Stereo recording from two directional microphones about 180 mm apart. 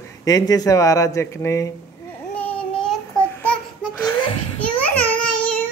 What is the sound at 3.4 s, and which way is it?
Babbling, 5° left (ahead or behind).